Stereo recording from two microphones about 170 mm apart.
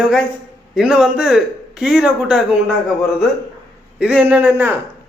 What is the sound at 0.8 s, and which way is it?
A man's voice, 5° right (ahead or behind).